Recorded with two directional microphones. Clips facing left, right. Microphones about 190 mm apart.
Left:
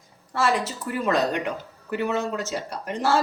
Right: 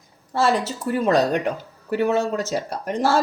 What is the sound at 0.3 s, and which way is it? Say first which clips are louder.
Speech: right 3 dB; 30° right (ahead or behind).